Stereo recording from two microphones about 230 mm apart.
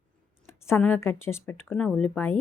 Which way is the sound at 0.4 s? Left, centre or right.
Centre.